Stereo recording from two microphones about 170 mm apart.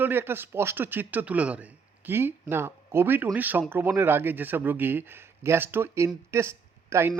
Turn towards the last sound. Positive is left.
turn(degrees=-15)  # may be behind; listen again after turning